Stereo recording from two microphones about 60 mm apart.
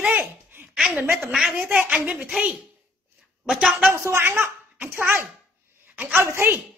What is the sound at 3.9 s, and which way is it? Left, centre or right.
Speech, right.